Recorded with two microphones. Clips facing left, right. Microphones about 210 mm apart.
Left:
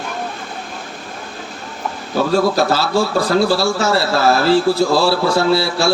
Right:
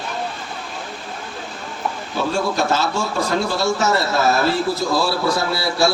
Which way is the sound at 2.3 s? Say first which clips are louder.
Left 5 dB; 35° left (ahead or behind).